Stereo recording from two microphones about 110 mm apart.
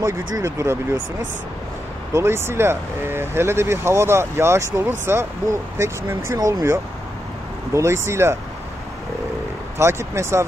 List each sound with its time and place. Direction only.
0.0 s speech: 30° right (ahead or behind)
2.1 s speech: 25° right (ahead or behind)
9.8 s speech: 25° right (ahead or behind)